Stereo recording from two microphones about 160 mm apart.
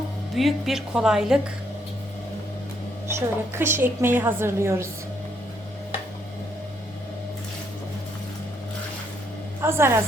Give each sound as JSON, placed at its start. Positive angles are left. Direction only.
{"t": 0.3, "sound": "a woman's voice", "side_deg": 0}
{"t": 3.2, "sound": "a woman's voice", "side_deg": -15}
{"t": 9.6, "sound": "a woman's voice", "side_deg": -15}